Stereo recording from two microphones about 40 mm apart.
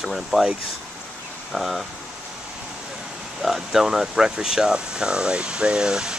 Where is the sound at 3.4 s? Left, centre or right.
Centre.